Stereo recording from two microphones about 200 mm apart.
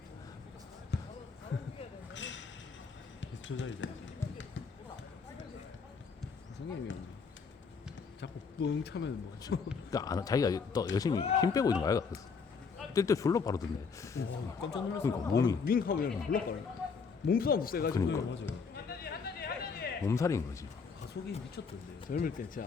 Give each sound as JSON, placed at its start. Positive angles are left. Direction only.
{"t": 0.9, "sound": "basketball bounce", "side_deg": 55}
{"t": 1.5, "sound": "speech", "side_deg": 70}
{"t": 2.1, "sound": "a sound", "side_deg": 65}
{"t": 3.2, "sound": "basketball bounce", "side_deg": 65}
{"t": 8.2, "sound": "speech", "side_deg": 60}
{"t": 9.9, "sound": "speech", "side_deg": 20}
{"t": 14.2, "sound": "speech", "side_deg": 55}
{"t": 14.8, "sound": "speech", "side_deg": 15}
{"t": 15.6, "sound": "speech", "side_deg": 45}
{"t": 17.9, "sound": "speech", "side_deg": 15}
{"t": 18.7, "sound": "a sound", "side_deg": 50}
{"t": 20.1, "sound": "speech", "side_deg": 15}
{"t": 22.1, "sound": "speech", "side_deg": 45}